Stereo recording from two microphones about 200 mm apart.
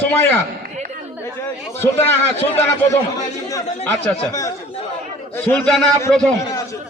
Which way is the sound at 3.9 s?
15° left (ahead or behind).